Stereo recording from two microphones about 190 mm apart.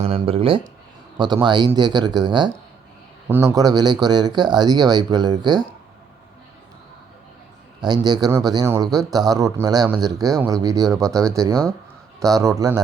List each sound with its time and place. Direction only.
0.0 s speech: 30° right (ahead or behind)
7.9 s a man's voice: 20° right (ahead or behind)